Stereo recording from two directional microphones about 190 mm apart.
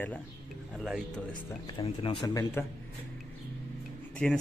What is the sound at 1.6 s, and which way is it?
Speech, 30° left (ahead or behind).